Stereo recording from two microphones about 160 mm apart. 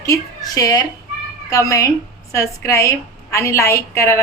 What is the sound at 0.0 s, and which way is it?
A woman's voice, 20° left (ahead or behind).